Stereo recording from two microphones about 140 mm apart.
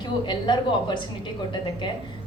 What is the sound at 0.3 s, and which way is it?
Speech, 35° left (ahead or behind).